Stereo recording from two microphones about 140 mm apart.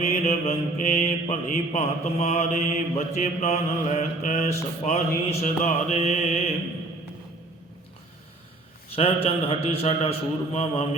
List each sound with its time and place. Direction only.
0.1 s mantra: 50° left (ahead or behind)
9.0 s mantra: 45° left (ahead or behind)